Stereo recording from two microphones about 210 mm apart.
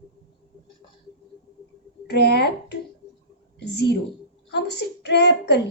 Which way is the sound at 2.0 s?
50° left (ahead or behind).